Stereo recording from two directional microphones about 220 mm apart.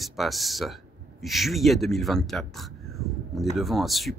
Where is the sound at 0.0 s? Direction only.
Centre (ahead or behind).